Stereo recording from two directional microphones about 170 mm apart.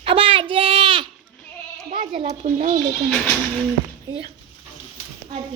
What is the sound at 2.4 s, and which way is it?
Speech, 50° right (ahead or behind).